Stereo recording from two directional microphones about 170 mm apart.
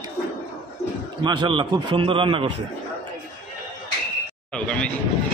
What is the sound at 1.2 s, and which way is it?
A man's voice, 30° right (ahead or behind).